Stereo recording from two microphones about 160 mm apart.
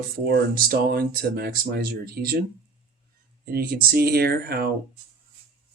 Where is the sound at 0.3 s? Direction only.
70° right (ahead or behind).